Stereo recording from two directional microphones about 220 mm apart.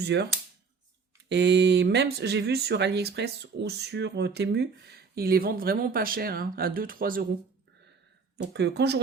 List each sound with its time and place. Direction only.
0.0 s speech: 50° right (ahead or behind)
1.3 s speech: 50° right (ahead or behind)
8.5 s speech: 50° right (ahead or behind)